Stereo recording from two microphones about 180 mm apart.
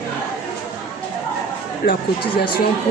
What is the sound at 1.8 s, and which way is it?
Speech, 55° left (ahead or behind).